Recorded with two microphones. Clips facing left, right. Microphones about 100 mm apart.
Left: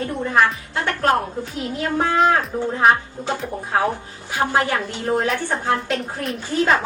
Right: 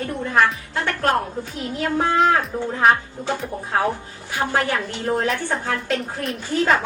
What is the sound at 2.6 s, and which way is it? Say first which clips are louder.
A woman's voice: left 1 dB; 20° left (ahead or behind).